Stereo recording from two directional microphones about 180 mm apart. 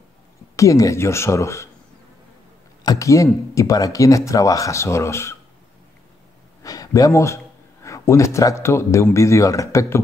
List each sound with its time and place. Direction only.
0.6 s a man's voice: 15° left (ahead or behind)
2.8 s a man's voice: 20° left (ahead or behind)
6.6 s a man's voice: 20° left (ahead or behind)